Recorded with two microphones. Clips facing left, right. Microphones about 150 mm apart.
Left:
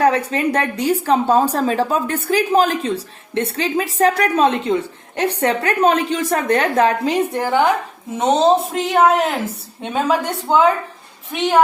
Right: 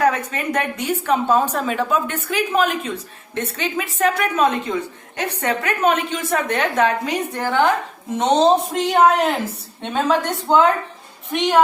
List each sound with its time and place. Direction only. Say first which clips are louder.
0.0 s a woman's voice: left 3 dB; 35° left (ahead or behind)
7.3 s speech: right 1 dB; 15° left (ahead or behind)
8.2 s a woman's voice: left 1 dB; 5° left (ahead or behind)